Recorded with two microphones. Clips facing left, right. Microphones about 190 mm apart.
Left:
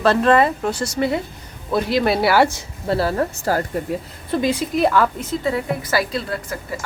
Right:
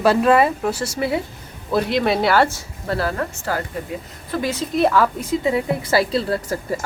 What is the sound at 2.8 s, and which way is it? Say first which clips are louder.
Speech: left 3 dB; 30° left (ahead or behind).